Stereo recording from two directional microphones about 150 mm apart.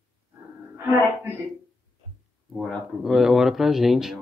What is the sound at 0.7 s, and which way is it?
Speech, 15° right (ahead or behind).